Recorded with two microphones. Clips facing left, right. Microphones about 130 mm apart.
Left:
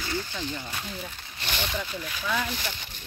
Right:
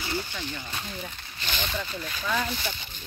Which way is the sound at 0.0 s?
15° right (ahead or behind).